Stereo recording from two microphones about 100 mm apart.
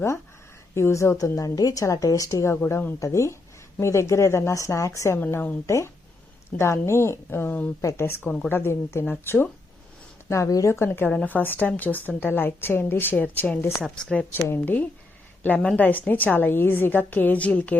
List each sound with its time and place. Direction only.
0.7 s a woman's voice: 25° left (ahead or behind)
1.4 s a woman's voice: 35° left (ahead or behind)
5.2 s a woman's voice: 20° left (ahead or behind)
14.3 s a woman's voice: 20° left (ahead or behind)